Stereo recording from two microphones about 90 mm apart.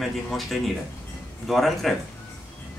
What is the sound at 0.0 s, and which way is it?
Speech, centre (ahead or behind).